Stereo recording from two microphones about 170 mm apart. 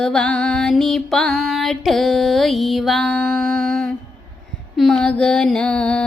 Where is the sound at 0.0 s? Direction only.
5° left (ahead or behind).